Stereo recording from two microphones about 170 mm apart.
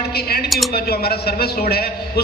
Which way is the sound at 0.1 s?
65° left (ahead or behind).